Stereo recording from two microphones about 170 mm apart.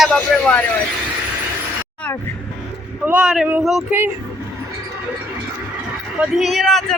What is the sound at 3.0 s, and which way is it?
Speech, 10° right (ahead or behind).